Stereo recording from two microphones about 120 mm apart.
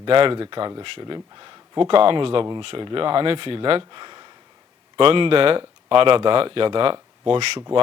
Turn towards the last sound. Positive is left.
turn(degrees=-50)  # may be behind; listen again after turning